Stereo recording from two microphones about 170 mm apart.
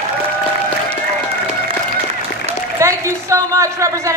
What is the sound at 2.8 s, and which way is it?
A man's voice, 15° right (ahead or behind).